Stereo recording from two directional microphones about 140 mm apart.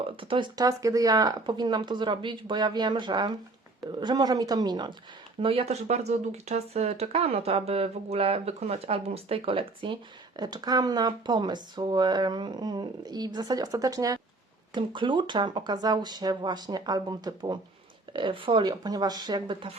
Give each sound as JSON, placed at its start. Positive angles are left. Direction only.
{"t": 0.2, "sound": "speech", "side_deg": -35}
{"t": 5.4, "sound": "speech", "side_deg": -40}